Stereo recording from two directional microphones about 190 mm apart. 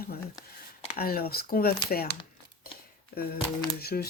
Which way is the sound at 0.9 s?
50° left (ahead or behind).